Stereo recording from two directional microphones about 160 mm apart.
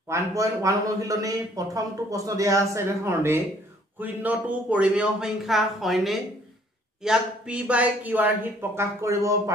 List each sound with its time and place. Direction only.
0.1 s a man's voice: 20° right (ahead or behind)